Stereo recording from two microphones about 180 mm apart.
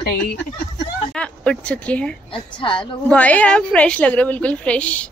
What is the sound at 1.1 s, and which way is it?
Speech, 5° left (ahead or behind).